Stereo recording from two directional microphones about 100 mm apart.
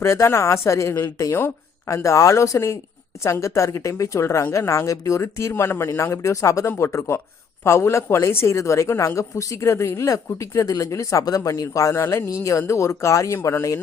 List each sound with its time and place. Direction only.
0.0 s a woman's voice: 30° left (ahead or behind)